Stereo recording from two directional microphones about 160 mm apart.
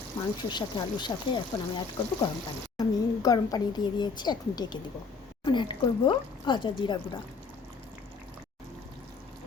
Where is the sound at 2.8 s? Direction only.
25° left (ahead or behind).